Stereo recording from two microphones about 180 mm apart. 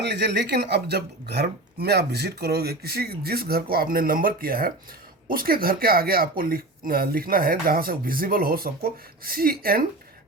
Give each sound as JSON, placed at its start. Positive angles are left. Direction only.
{"t": 0.0, "sound": "speech", "side_deg": -70}